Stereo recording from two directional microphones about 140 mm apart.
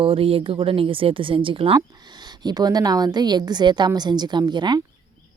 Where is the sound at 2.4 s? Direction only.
30° right (ahead or behind).